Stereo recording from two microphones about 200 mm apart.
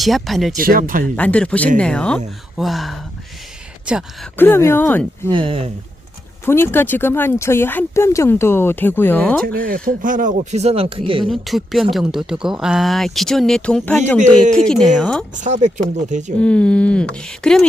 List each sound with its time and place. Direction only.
0.0 s speech: centre (ahead or behind)
0.5 s speech: 45° right (ahead or behind)
1.0 s speech: 5° left (ahead or behind)
4.4 s speech: 10° left (ahead or behind)
5.3 s speech: 25° right (ahead or behind)
6.4 s speech: 10° left (ahead or behind)
9.5 s speech: 45° right (ahead or behind); by 11.3 s 25° right (ahead or behind)
11.3 s speech: centre (ahead or behind)
15.4 s speech: 35° right (ahead or behind)
16.4 s speech: 5° left (ahead or behind)